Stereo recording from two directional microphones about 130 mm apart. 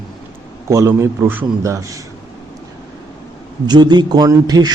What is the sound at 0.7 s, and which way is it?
A man's voice, 20° right (ahead or behind).